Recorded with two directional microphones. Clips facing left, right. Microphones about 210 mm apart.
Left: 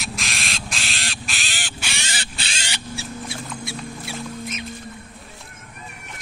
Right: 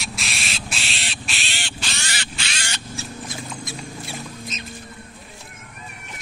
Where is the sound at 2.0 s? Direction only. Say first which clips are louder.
Even; 30° left (ahead or behind).